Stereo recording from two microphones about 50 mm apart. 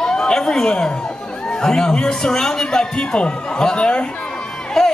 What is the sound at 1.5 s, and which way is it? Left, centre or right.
A man's voice, centre.